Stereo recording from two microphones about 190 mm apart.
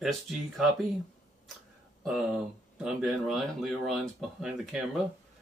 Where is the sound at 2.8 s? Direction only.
5° right (ahead or behind).